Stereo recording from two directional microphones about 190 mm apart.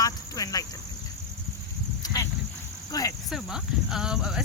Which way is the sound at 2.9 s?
20° left (ahead or behind).